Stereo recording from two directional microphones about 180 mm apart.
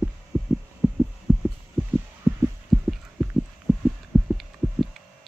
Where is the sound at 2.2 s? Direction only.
15° right (ahead or behind).